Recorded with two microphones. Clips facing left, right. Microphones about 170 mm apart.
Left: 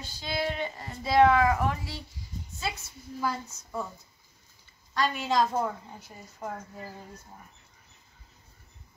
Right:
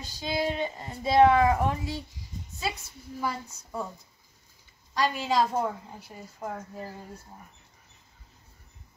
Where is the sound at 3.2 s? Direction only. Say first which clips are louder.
Left 1 dB; 10° right (ahead or behind).